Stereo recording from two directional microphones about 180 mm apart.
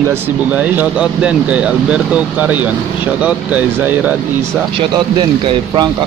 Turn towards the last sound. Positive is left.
turn(degrees=-25)  # may be behind; listen again after turning